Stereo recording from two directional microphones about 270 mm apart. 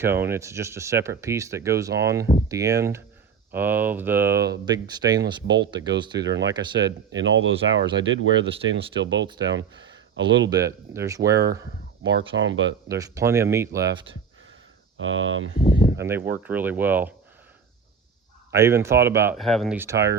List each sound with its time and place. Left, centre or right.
0.0 s speech: centre
6.2 s speech: right
10.5 s speech: centre
12.0 s speech: right
12.9 s speech: centre
14.9 s speech: right
16.0 s speech: centre
18.5 s speech: centre